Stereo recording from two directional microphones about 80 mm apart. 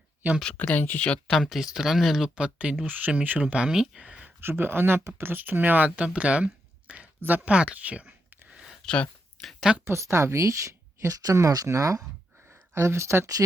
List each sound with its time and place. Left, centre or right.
0.5 s speech: centre
1.3 s speech: centre
4.4 s speech: right; by 8.7 s centre
8.9 s a sound: centre
9.8 s speech: right
12.5 s speech: right